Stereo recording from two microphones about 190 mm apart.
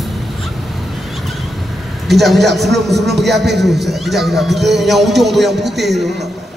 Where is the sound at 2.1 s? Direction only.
Centre (ahead or behind).